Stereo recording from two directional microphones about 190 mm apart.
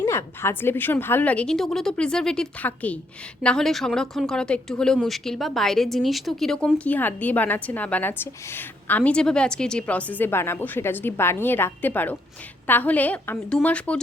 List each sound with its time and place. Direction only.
0.0 s speech: 15° left (ahead or behind)